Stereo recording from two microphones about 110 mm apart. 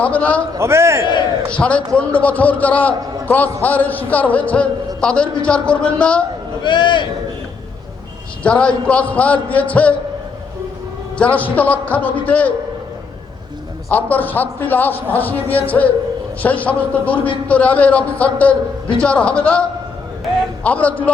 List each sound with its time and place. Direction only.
0.0 s a man's voice: 10° left (ahead or behind)
0.5 s a man's voice: 25° right (ahead or behind)
1.5 s a man's voice: 10° left (ahead or behind)
6.6 s a man's voice: 45° left (ahead or behind)
8.4 s a man's voice: 10° left (ahead or behind)
11.2 s a man's voice: 15° left (ahead or behind)
13.9 s a man's voice: 15° left (ahead or behind)
20.7 s a man's voice: 10° left (ahead or behind)